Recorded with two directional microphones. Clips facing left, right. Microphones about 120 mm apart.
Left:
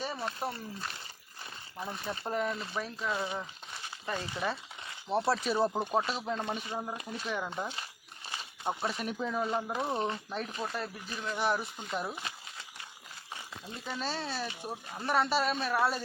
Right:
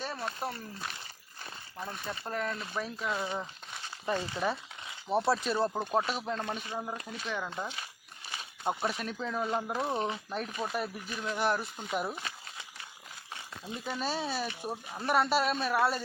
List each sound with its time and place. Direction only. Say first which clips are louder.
0.0 s speech: left 1 dB; 5° left (ahead or behind)
2.6 s speech: even; centre (ahead or behind)
6.9 s speech: left 1 dB; 15° left (ahead or behind)
8.4 s a sound: right 2 dB; 5° right (ahead or behind)
9.0 s speech: left 1 dB; 10° left (ahead or behind)
13.7 s speech: right 3 dB; 10° right (ahead or behind)